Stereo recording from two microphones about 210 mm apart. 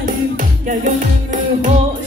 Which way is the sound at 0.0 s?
40° right (ahead or behind).